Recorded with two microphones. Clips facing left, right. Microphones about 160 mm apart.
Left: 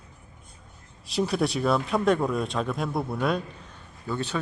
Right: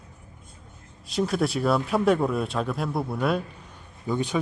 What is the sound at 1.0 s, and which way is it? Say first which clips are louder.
Speech: right 1 dB; centre (ahead or behind).